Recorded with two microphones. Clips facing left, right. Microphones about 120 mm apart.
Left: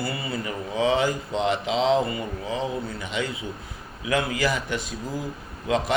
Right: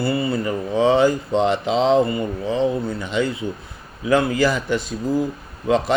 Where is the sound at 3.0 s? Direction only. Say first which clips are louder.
Right 7 dB; 30° right (ahead or behind).